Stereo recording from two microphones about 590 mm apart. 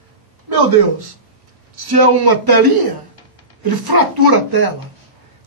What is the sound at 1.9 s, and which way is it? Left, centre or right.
A man's voice, right.